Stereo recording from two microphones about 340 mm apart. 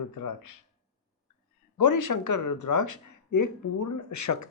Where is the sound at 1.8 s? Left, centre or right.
Left.